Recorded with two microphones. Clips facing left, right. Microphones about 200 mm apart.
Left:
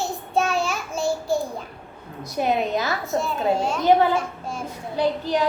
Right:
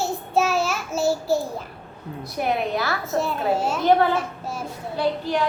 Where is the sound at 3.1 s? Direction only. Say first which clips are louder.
Even; centre (ahead or behind).